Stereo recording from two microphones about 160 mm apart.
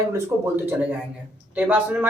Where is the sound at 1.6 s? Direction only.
10° right (ahead or behind).